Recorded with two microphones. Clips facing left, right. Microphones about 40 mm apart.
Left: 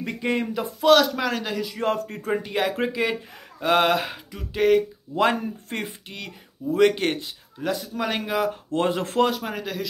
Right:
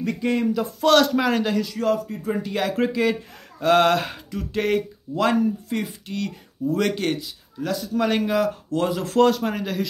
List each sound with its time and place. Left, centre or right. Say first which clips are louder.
0.0 s speech: right 3 dB; left
0.8 s speech: even; centre
1.8 s speech: right 2 dB; left
2.5 s mantra: right 4 dB; centre
5.1 s speech: right 2 dB; left
6.0 s mantra: right 8 dB; centre
6.7 s speech: left 3 dB; left
7.9 s mantra: right 9 dB; centre
8.7 s speech: right 1 dB; left
9.4 s speech: right 4 dB; centre